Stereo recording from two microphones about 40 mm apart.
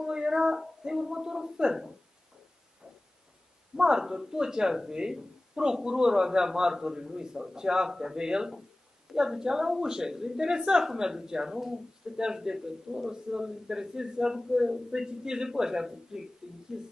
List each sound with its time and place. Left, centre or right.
0.0 s child singing: centre
1.1 s a sound: centre
3.7 s a man's voice: centre